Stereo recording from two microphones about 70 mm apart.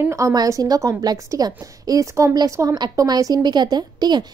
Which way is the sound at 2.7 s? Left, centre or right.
Right.